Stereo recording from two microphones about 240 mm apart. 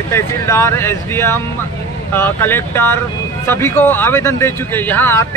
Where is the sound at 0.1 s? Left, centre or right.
Centre.